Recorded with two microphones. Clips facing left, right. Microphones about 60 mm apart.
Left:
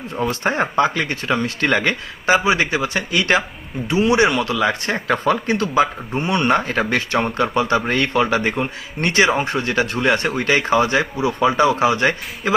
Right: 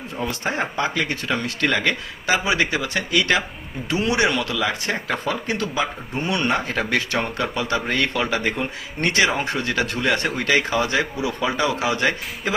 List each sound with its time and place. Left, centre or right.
0.3 s speech: left
4.4 s speech: left
5.5 s speech: left
6.5 s speech: left